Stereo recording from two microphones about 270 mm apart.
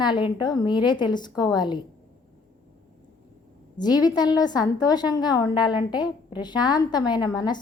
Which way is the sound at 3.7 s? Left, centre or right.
Centre.